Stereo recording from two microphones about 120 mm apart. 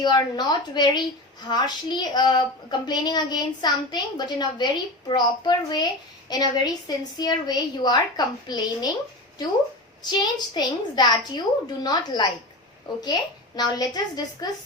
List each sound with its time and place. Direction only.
0.0 s a woman's voice: 35° left (ahead or behind)
10.0 s a woman's voice: 35° left (ahead or behind)